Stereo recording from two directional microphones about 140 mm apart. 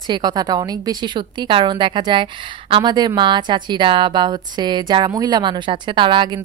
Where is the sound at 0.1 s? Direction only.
30° right (ahead or behind).